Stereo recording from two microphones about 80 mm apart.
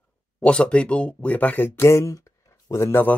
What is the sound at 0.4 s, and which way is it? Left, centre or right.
Speech, centre.